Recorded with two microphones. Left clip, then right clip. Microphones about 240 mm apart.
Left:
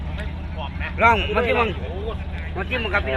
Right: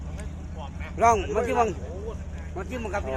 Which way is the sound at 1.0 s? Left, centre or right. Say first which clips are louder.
Left 4 dB; right.